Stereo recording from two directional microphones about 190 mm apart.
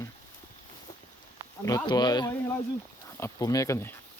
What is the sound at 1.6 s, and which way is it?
Speech, 20° left (ahead or behind).